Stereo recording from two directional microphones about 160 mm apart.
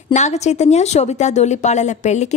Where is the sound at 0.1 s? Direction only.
45° left (ahead or behind).